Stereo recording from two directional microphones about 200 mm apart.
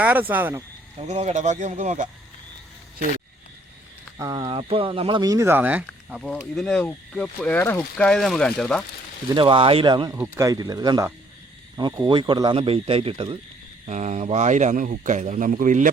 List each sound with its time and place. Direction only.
0.0 s speech: 10° right (ahead or behind)
0.9 s speech: 35° right (ahead or behind)
4.2 s speech: 20° right (ahead or behind); by 8.8 s 5° left (ahead or behind)
9.3 s speech: 25° right (ahead or behind); by 15.9 s 40° right (ahead or behind)